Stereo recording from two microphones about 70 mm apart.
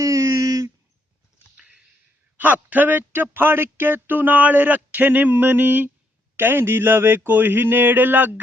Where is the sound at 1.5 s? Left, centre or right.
Centre.